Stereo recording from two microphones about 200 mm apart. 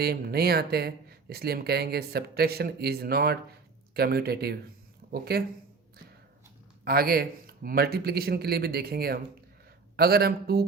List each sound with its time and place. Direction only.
0.0 s speech: 50° right (ahead or behind)
6.8 s speech: 50° right (ahead or behind)